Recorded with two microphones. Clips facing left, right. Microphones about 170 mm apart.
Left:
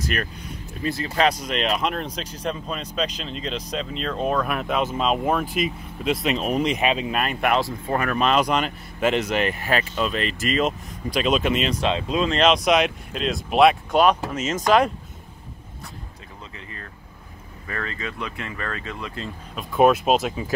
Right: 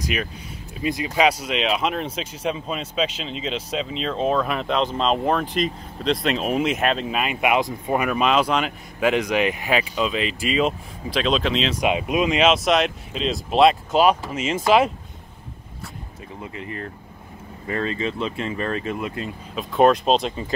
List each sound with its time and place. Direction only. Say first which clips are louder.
0.0 s speech: right 1 dB; 5° right (ahead or behind)
11.7 s speech: right 2 dB; 15° right (ahead or behind)
16.5 s speech: right 8 dB; 25° right (ahead or behind)
19.2 s speech: right 3 dB; centre (ahead or behind)